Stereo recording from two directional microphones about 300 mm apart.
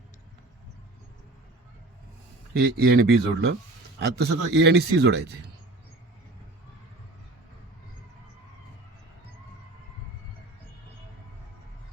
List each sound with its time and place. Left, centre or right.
2.6 s a man's voice: right